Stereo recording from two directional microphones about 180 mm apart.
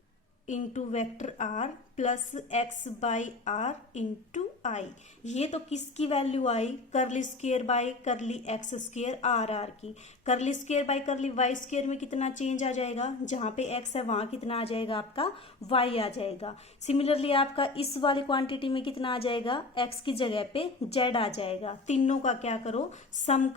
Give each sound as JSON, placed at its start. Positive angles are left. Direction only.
{"t": 0.4, "sound": "a woman's voice", "side_deg": 40}